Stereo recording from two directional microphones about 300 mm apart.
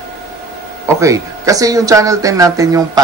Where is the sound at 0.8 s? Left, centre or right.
Centre.